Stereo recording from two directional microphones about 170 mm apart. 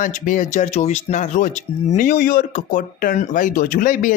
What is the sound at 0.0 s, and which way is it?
Speech, 50° left (ahead or behind).